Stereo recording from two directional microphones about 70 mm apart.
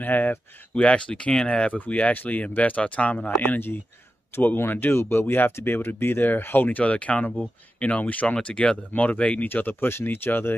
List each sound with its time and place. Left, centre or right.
0.0 s speech: left
6.8 s speech: centre